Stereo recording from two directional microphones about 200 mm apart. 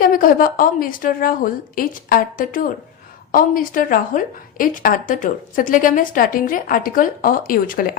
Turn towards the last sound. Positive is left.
turn(degrees=45)  # may be behind; listen again after turning